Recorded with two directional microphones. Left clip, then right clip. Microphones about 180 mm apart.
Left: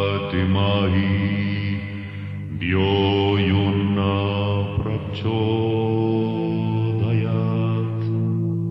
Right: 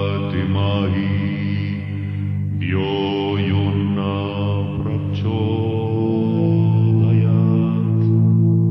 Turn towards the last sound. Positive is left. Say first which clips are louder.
# right 4 dB
turn(degrees=-35)  # may be behind; listen again after turning